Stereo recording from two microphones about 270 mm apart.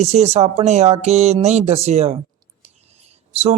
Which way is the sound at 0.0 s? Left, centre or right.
Right.